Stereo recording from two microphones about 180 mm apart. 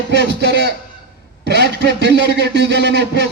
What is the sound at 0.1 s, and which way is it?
A man's voice, 70° right (ahead or behind).